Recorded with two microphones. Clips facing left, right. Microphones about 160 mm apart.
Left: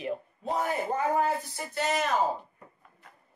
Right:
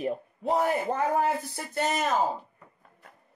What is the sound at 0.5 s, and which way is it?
Speech, 70° right (ahead or behind).